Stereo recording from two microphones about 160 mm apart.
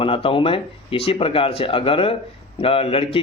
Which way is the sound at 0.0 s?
35° left (ahead or behind).